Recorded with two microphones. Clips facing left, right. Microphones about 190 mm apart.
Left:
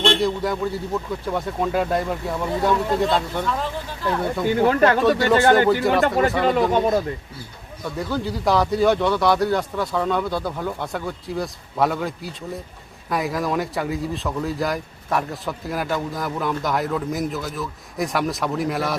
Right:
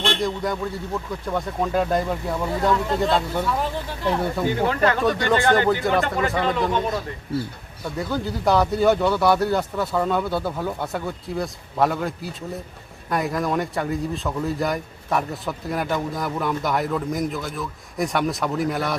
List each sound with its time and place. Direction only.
0.2 s speech: 5° left (ahead or behind)
4.7 s speech: 50° left (ahead or behind)
5.0 s speech: 5° left (ahead or behind)
6.1 s speech: 40° left (ahead or behind)
7.9 s speech: centre (ahead or behind)